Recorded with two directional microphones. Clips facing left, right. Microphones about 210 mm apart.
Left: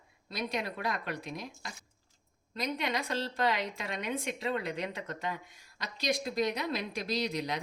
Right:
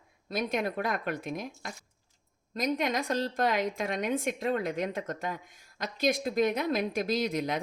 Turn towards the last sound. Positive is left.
turn(degrees=-50)  # may be behind; listen again after turning